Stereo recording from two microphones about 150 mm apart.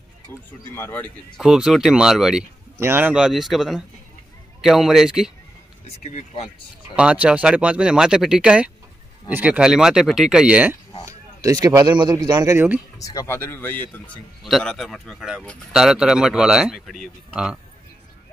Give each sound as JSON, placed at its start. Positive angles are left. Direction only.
{"t": 0.3, "sound": "speech", "side_deg": 15}
{"t": 1.3, "sound": "a man's voice", "side_deg": -5}
{"t": 2.8, "sound": "a man's voice", "side_deg": -15}
{"t": 6.1, "sound": "speech", "side_deg": 45}
{"t": 7.0, "sound": "a man's voice", "side_deg": -5}
{"t": 11.1, "sound": "speech", "side_deg": -25}
{"t": 13.0, "sound": "speech", "side_deg": 20}
{"t": 14.4, "sound": "a man's voice", "side_deg": 0}